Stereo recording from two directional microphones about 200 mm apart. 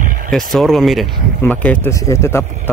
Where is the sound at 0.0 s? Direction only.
45° right (ahead or behind).